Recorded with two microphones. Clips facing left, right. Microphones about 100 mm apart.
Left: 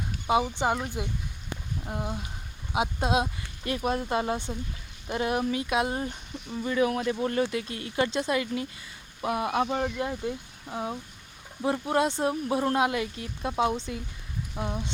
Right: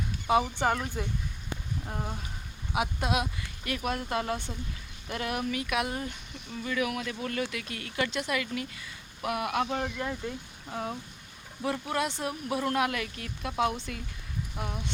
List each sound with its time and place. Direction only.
0.3 s speech: 15° left (ahead or behind)
2.7 s speech: 25° left (ahead or behind)